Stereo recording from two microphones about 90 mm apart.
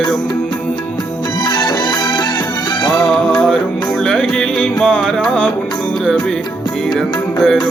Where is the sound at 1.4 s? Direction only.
55° left (ahead or behind).